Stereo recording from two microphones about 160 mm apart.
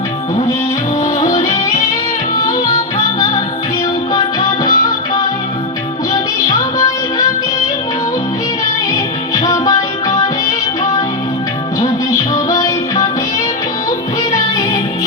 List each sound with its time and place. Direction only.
4.1 s music: 25° left (ahead or behind)
9.3 s music: 25° left (ahead or behind)
12.3 s music: 25° left (ahead or behind)